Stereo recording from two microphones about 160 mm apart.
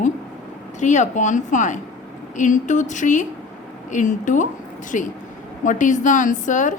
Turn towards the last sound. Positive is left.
turn(degrees=50)  # may be behind; listen again after turning